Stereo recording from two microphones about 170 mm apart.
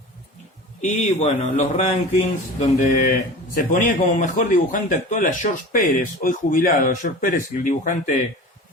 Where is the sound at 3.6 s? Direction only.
55° left (ahead or behind).